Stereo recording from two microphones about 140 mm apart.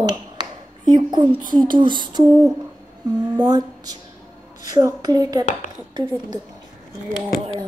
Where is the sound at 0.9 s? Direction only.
30° right (ahead or behind).